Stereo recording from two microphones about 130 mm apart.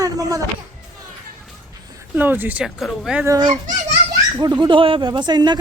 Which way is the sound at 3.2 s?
30° right (ahead or behind).